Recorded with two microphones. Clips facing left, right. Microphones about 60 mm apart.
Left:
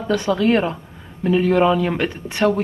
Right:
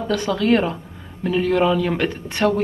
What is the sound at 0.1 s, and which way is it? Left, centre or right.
Speech, centre.